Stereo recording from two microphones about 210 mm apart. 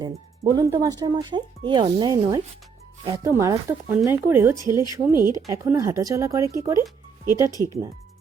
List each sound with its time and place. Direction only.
0.0 s speech: 15° right (ahead or behind)